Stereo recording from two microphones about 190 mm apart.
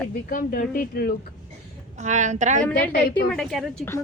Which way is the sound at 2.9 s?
55° left (ahead or behind).